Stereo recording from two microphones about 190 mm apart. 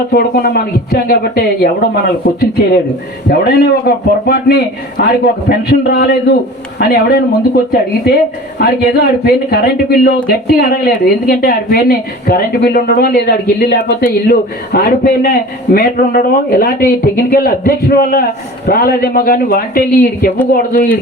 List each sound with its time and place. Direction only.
0.1 s a man's voice: 55° left (ahead or behind)